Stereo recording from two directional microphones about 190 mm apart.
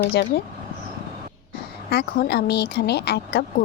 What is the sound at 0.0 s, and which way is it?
Speech, 55° left (ahead or behind).